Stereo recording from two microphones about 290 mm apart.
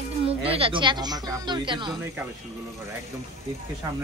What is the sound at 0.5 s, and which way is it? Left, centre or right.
Speech, centre.